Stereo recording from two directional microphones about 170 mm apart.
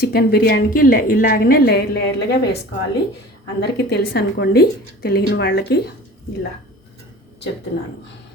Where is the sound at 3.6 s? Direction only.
75° left (ahead or behind).